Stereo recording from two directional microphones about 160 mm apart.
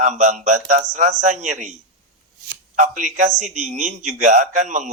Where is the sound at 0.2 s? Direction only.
50° right (ahead or behind).